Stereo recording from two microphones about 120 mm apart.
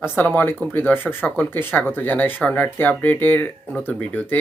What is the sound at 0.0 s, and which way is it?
Speech, 20° left (ahead or behind).